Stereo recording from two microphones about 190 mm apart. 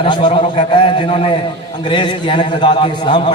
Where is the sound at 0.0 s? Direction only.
25° left (ahead or behind).